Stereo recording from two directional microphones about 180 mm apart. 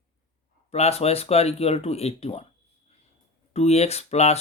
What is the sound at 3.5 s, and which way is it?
Speech, 35° left (ahead or behind).